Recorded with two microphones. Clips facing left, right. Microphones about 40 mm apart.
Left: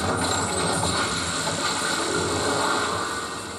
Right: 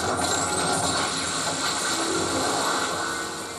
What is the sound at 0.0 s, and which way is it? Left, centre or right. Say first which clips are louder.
Music: left 1 dB; centre.